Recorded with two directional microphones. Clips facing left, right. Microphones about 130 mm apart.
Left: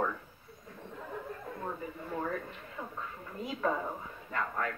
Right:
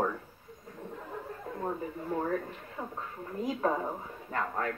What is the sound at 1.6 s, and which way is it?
Speech, 35° right (ahead or behind).